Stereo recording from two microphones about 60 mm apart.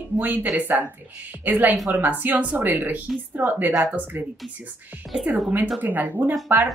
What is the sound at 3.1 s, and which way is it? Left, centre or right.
Speech, centre.